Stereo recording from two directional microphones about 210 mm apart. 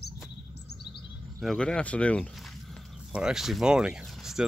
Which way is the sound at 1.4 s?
5° left (ahead or behind).